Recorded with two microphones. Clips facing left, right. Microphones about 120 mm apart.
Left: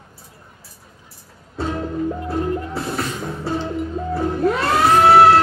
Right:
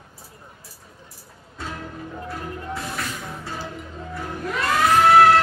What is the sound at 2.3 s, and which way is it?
Music, 35° left (ahead or behind).